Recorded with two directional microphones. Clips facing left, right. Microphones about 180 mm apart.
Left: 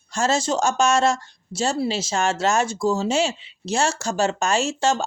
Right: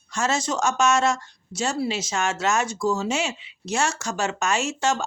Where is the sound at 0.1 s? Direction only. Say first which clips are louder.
Left 3 dB; 30° left (ahead or behind).